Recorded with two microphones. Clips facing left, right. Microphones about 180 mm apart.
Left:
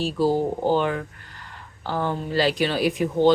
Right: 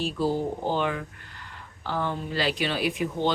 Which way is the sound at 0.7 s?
40° left (ahead or behind).